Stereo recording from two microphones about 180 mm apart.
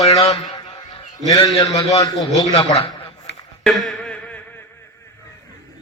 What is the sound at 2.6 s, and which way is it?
Speech, 35° left (ahead or behind).